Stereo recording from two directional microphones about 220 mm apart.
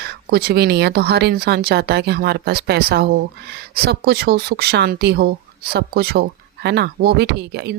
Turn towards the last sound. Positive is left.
turn(degrees=-45)  # may be behind; listen again after turning